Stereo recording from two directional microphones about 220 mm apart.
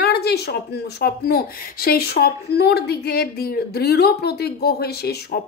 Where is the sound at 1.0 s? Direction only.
45° left (ahead or behind).